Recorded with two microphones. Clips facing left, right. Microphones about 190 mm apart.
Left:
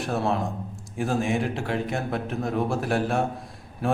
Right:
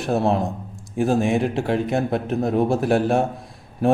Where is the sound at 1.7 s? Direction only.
40° right (ahead or behind).